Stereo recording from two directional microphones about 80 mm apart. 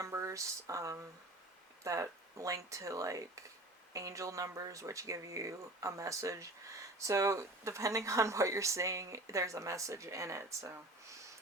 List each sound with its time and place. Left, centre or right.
0.0 s speech: right